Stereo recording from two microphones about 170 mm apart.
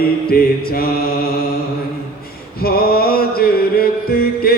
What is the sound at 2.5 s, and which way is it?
Mantra, 60° left (ahead or behind).